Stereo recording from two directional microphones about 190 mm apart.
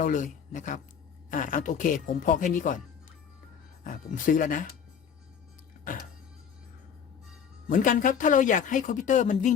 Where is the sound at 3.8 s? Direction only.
45° left (ahead or behind).